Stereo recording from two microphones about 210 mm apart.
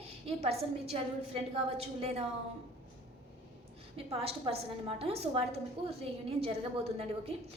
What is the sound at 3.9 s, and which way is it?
Speech, 30° right (ahead or behind).